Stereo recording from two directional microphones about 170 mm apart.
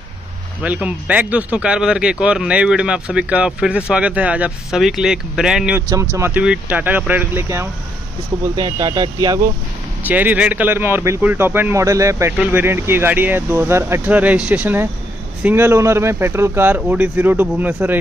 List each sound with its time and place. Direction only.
0.6 s a man's voice: 10° right (ahead or behind)
5.8 s speech: 20° right (ahead or behind)
10.0 s speech: 10° right (ahead or behind)